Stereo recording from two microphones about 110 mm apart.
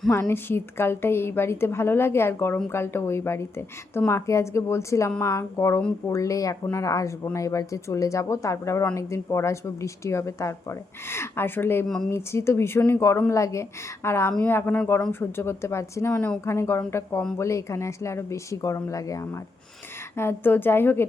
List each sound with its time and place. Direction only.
0.1 s a woman's voice: 20° left (ahead or behind)
16.1 s speech: 10° left (ahead or behind)
16.5 s a woman's voice: 25° left (ahead or behind)